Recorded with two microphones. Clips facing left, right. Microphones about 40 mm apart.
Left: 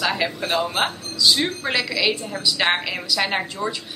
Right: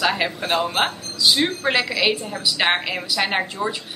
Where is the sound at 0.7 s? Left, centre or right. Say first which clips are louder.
Right 1 dB; centre.